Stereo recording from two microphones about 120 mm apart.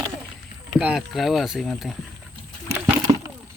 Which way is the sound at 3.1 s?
40° right (ahead or behind).